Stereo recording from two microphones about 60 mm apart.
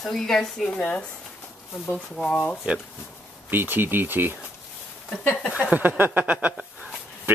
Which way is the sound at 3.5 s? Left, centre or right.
Right.